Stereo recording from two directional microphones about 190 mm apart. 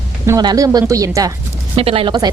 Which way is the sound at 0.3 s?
20° right (ahead or behind).